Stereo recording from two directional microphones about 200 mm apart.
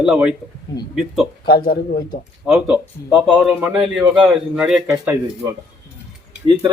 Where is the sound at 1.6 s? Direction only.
45° left (ahead or behind).